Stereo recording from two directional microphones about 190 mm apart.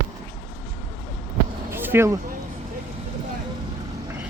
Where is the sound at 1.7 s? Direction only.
10° right (ahead or behind).